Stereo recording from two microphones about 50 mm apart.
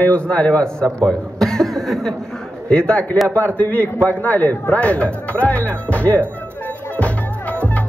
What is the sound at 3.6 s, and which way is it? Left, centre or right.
A man's voice, left.